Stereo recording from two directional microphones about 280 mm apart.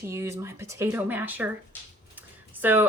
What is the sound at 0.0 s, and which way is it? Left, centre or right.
Speech, centre.